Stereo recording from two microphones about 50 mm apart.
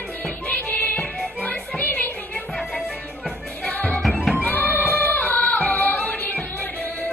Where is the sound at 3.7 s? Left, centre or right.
Left.